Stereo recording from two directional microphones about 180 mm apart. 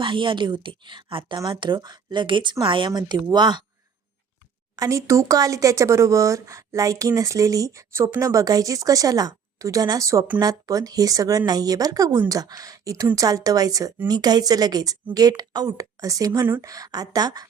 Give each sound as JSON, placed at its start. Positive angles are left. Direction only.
{"t": 0.0, "sound": "speech", "side_deg": -25}
{"t": 4.8, "sound": "speech", "side_deg": -15}